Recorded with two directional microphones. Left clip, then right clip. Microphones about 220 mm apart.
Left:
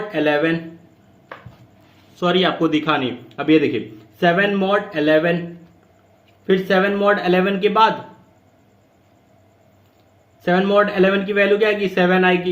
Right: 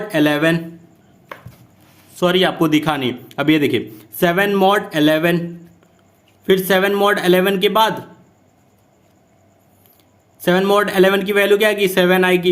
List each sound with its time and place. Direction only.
0.1 s speech: 50° right (ahead or behind)
2.1 s speech: 40° right (ahead or behind)
6.4 s speech: 50° right (ahead or behind)
10.4 s speech: 50° right (ahead or behind)